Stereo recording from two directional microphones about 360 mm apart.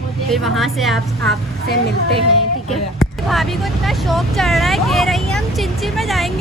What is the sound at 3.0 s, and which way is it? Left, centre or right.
Speech, centre.